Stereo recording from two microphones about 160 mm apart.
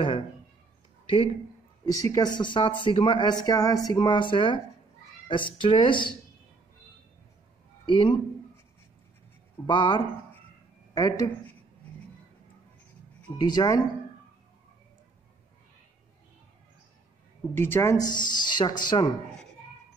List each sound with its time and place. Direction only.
1.0 s speech: 35° left (ahead or behind)
2.0 s speech: 25° left (ahead or behind)
7.8 s a man's voice: 30° left (ahead or behind)
9.7 s speech: 30° left (ahead or behind)
13.4 s speech: 25° left (ahead or behind)
17.6 s speech: 15° left (ahead or behind)